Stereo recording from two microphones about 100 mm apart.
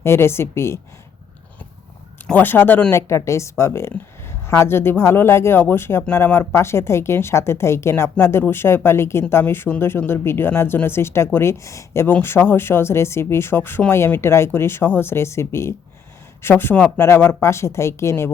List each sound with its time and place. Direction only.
0.0 s speech: 25° left (ahead or behind)
2.3 s speech: 20° left (ahead or behind)